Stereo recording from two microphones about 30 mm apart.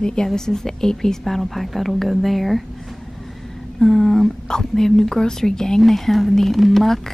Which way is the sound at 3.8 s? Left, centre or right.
Centre.